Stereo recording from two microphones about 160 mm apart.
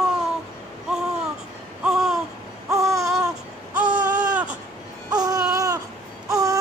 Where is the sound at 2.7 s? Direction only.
20° right (ahead or behind).